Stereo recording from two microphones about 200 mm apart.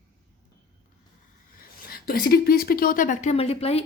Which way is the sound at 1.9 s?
50° left (ahead or behind).